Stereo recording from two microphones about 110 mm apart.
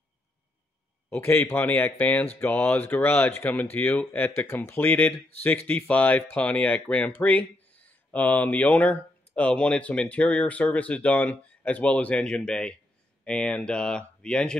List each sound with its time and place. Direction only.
1.1 s speech: 20° left (ahead or behind)